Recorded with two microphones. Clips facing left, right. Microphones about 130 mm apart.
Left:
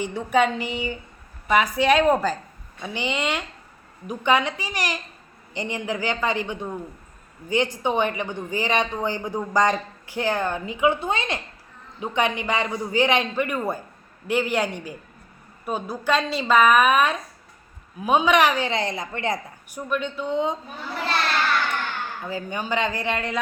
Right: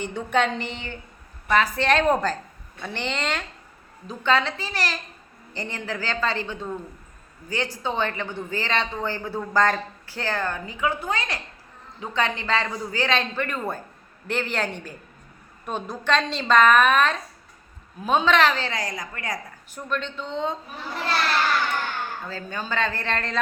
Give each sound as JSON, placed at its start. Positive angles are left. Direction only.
{"t": 0.0, "sound": "speech", "side_deg": 5}
{"t": 19.7, "sound": "speech", "side_deg": 10}
{"t": 22.3, "sound": "speech", "side_deg": 15}